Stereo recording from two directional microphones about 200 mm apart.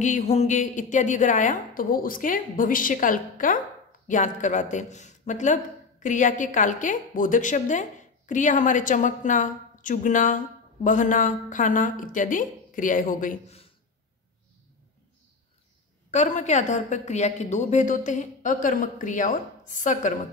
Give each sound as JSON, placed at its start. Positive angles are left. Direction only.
{"t": 0.0, "sound": "a woman's voice", "side_deg": 35}
{"t": 16.1, "sound": "a woman's voice", "side_deg": 35}